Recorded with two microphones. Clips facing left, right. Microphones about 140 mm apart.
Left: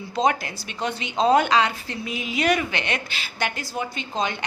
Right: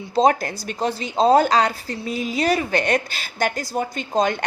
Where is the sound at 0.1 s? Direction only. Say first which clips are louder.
Right 5 dB; 35° right (ahead or behind).